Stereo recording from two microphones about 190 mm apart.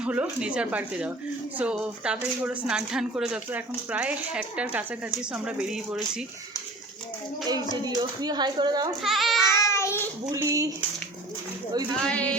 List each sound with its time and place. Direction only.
0.0 s a woman's voice: 5° right (ahead or behind)
7.4 s speech: 20° right (ahead or behind)
9.0 s speech: centre (ahead or behind)
9.5 s child singing: 15° left (ahead or behind)
10.3 s a woman's voice: 15° right (ahead or behind)
12.0 s music: 5° left (ahead or behind)